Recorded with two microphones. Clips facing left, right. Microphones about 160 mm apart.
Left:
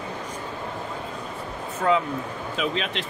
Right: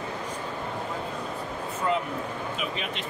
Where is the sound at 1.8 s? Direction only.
90° left.